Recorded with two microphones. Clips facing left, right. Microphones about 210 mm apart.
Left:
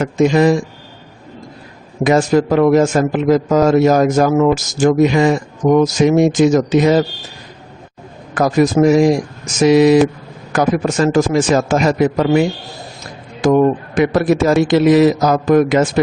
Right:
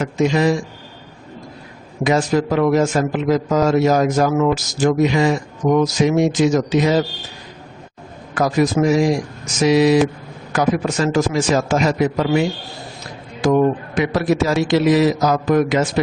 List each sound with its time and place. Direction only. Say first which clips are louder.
0.0 s a man's voice: left 4 dB; 50° left (ahead or behind)
2.0 s a man's voice: left 4 dB; 50° left (ahead or behind)
8.4 s a man's voice: left 4 dB; 50° left (ahead or behind)
13.4 s a man's voice: left 3 dB; 50° left (ahead or behind)